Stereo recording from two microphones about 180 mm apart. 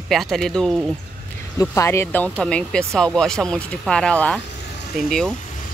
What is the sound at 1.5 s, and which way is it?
Speech, 15° left (ahead or behind).